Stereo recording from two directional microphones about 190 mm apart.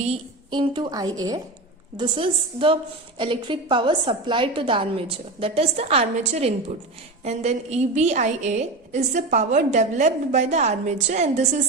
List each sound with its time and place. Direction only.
0.0 s a woman's voice: 30° right (ahead or behind)